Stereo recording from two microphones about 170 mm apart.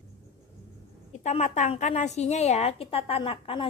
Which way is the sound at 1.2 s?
45° left (ahead or behind).